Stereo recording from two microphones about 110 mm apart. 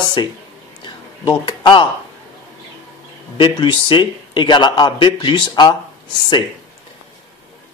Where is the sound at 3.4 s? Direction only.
45° left (ahead or behind).